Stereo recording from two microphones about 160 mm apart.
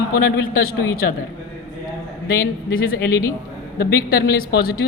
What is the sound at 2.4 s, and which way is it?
Speech, 65° left (ahead or behind).